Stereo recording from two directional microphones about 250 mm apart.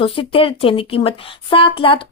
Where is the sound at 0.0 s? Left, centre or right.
Left.